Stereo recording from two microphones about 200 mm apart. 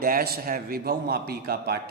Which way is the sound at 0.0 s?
50° right (ahead or behind).